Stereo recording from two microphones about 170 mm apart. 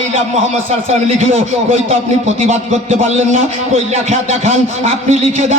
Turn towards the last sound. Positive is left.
turn(degrees=-45)  # may be behind; listen again after turning